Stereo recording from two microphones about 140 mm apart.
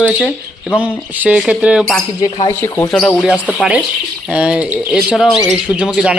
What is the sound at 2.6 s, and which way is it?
Speech, 20° left (ahead or behind).